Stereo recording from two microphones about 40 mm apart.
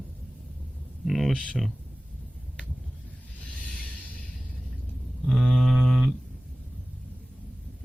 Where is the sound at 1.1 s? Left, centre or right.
Centre.